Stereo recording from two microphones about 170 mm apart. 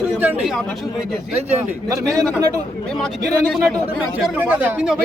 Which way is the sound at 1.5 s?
20° right (ahead or behind).